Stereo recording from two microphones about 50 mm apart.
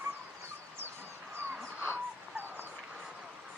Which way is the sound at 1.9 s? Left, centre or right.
Right.